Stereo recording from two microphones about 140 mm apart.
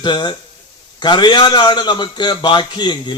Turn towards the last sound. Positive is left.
turn(degrees=30)  # may be behind; listen again after turning